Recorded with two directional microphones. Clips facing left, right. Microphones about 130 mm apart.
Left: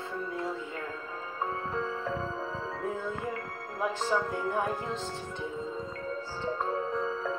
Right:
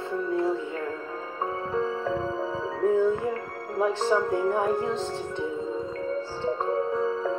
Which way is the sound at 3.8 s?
30° right (ahead or behind).